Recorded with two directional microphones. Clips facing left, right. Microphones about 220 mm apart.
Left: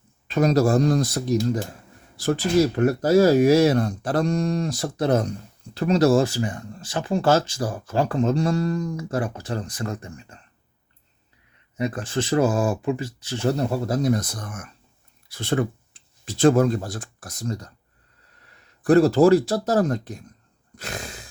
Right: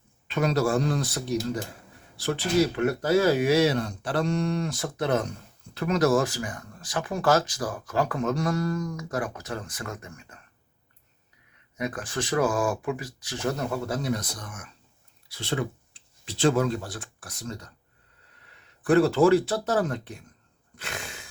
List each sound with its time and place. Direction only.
0.3 s speech: 40° left (ahead or behind)
11.8 s speech: 25° left (ahead or behind)
18.8 s speech: 40° left (ahead or behind)
20.7 s a sound: 40° left (ahead or behind)